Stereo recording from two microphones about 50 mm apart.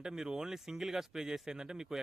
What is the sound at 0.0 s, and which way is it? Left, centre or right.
Speech, centre.